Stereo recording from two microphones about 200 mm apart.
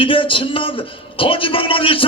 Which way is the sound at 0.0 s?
25° left (ahead or behind).